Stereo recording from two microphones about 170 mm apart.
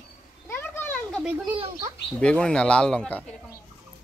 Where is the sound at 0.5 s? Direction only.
10° left (ahead or behind).